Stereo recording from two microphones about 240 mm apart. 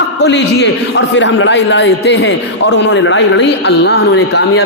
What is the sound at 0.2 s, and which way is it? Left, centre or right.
A man's voice, left.